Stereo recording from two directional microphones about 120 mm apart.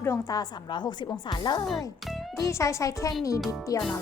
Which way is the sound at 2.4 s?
25° left (ahead or behind).